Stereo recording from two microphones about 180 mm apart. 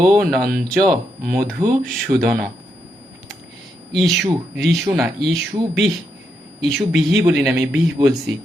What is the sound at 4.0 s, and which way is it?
Speech, centre (ahead or behind).